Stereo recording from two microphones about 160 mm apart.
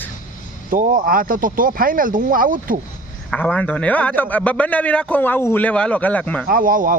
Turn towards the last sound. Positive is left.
turn(degrees=-60)  # may be behind; listen again after turning